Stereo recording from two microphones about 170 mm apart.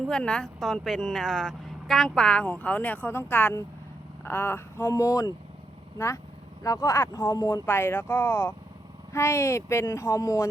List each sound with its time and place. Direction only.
0.0 s speech: 5° left (ahead or behind); by 5.3 s 20° left (ahead or behind)
6.6 s speech: 20° left (ahead or behind)